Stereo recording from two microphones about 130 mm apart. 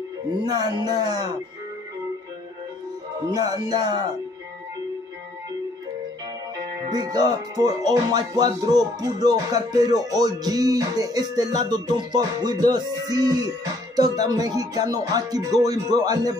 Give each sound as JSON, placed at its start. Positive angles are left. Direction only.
{"t": 0.4, "sound": "music", "side_deg": -30}
{"t": 3.3, "sound": "music", "side_deg": -35}
{"t": 6.6, "sound": "music", "side_deg": -25}